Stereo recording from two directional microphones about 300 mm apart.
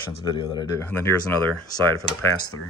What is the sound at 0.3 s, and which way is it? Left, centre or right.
Speech, centre.